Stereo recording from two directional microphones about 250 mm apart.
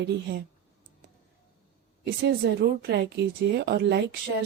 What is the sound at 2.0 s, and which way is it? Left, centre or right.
Speech, right.